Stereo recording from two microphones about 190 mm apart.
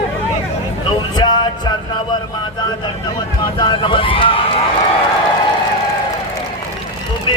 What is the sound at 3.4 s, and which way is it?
Speech, 25° left (ahead or behind).